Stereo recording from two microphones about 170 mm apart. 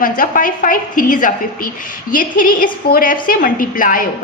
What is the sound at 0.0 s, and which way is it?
A woman's voice, 55° left (ahead or behind).